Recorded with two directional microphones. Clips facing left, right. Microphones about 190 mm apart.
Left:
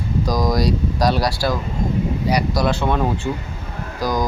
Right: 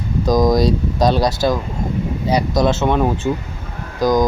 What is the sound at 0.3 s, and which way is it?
Speech, 20° right (ahead or behind).